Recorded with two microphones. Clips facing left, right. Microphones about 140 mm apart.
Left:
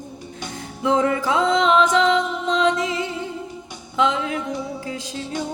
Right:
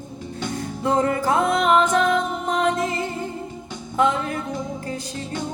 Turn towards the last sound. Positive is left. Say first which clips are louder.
# even
turn(degrees=90)